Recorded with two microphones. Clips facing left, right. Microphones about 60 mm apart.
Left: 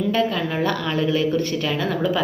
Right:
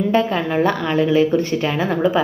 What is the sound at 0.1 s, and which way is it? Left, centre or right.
Speech, right.